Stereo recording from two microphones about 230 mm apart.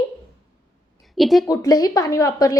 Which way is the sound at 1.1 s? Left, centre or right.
Centre.